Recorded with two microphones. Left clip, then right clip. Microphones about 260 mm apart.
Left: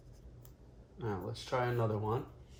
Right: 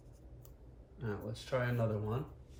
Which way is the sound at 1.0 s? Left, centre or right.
Left.